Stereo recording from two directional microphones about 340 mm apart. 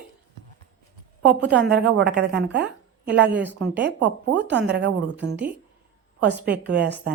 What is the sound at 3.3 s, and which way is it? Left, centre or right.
Speech, centre.